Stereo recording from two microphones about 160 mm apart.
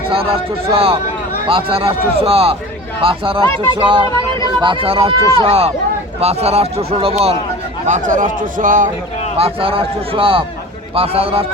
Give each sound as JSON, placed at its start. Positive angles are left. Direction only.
{"t": 0.1, "sound": "speech", "side_deg": -35}
{"t": 7.9, "sound": "a man's voice", "side_deg": -50}
{"t": 9.4, "sound": "speech", "side_deg": -35}